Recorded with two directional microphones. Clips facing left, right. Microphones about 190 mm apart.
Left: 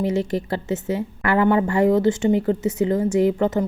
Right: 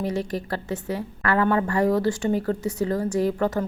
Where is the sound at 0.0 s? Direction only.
25° left (ahead or behind).